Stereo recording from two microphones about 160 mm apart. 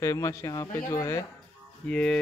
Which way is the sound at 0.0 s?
20° left (ahead or behind).